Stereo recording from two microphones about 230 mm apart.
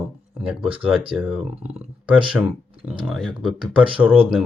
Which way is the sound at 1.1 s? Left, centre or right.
Centre.